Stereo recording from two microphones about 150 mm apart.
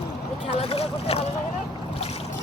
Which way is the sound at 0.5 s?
45° left (ahead or behind).